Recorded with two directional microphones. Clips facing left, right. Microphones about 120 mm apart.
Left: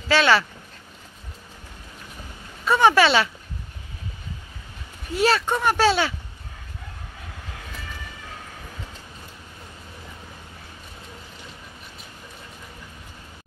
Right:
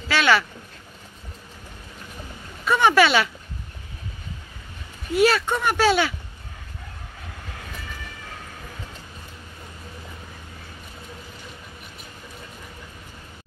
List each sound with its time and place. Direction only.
0.1 s speech: 30° left (ahead or behind)
2.7 s speech: 30° left (ahead or behind)
5.1 s speech: 35° left (ahead or behind)